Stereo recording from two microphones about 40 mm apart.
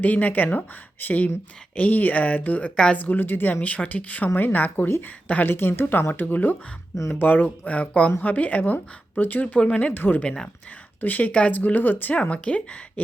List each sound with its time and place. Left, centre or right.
0.0 s speech: left
5.5 s speech: left
9.6 s speech: left
9.9 s speech: left
10.2 s speech: left
11.0 s speech: left
12.3 s speech: left